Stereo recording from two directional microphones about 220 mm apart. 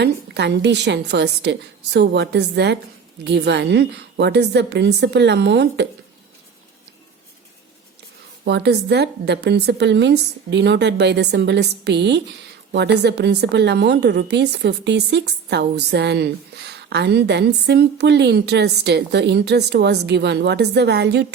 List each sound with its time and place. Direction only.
0.0 s a woman's voice: 50° right (ahead or behind)
8.4 s a woman's voice: 50° right (ahead or behind)